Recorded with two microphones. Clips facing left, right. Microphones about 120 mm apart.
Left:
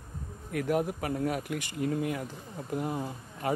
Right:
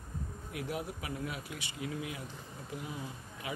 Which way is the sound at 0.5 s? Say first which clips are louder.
Left 10 dB; 50° left (ahead or behind).